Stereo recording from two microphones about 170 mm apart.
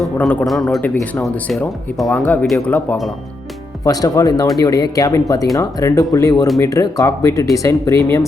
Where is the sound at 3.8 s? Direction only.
20° left (ahead or behind).